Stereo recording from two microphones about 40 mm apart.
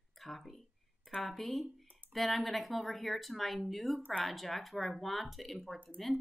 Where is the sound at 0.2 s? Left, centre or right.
Centre.